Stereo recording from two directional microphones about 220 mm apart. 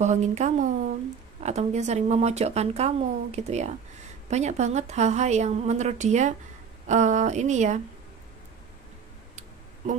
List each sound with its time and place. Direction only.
0.0 s speech: 30° right (ahead or behind)